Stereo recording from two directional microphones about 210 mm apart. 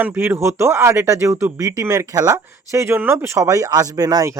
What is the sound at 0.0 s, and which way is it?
Speech, 10° right (ahead or behind).